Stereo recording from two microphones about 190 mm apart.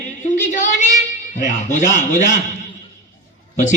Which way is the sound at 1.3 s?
40° left (ahead or behind).